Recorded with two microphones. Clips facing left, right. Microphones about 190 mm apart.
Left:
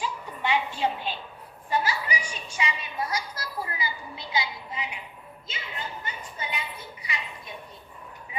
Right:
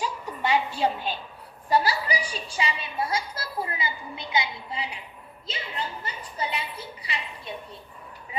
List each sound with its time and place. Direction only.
0.0 s music: 40° right (ahead or behind)
1.7 s a woman's voice: 35° right (ahead or behind); by 4.8 s 20° right (ahead or behind)
5.5 s a woman's voice: 35° right (ahead or behind)